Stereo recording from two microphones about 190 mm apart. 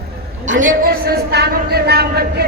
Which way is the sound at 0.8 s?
50° right (ahead or behind).